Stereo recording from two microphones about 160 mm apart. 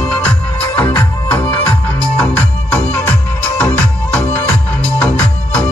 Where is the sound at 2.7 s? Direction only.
10° left (ahead or behind).